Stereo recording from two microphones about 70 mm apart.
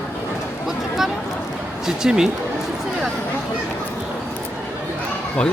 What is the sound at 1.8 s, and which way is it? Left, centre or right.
Speech, centre.